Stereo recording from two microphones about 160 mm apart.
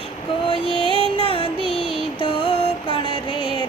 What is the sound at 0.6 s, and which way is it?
Music, 35° right (ahead or behind).